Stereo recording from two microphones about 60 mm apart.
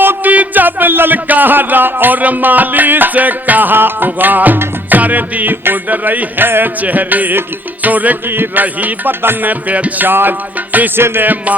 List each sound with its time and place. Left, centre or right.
0.0 s speech: right
4.6 s music: right